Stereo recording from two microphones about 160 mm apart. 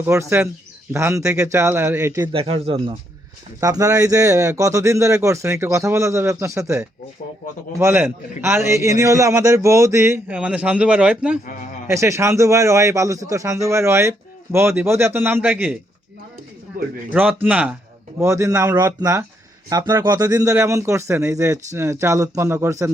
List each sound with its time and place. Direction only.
0.0 s a man's voice: 15° right (ahead or behind)
2.3 s speech: 35° right (ahead or behind)
3.6 s a man's voice: 20° right (ahead or behind); by 11.3 s 5° right (ahead or behind)
11.9 s a man's voice: 20° right (ahead or behind)
17.4 s a man's voice: 10° right (ahead or behind)